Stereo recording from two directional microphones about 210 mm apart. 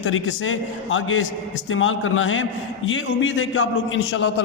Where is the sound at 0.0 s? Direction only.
70° left (ahead or behind).